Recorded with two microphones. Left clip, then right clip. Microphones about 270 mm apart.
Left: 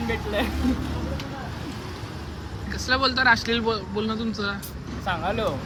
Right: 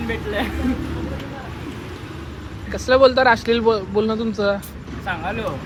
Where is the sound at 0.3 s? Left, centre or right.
Left.